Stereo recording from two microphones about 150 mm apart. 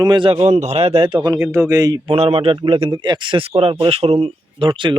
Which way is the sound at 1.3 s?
20° right (ahead or behind).